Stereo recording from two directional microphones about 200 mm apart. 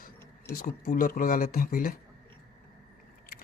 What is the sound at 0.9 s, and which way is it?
Speech, 45° left (ahead or behind).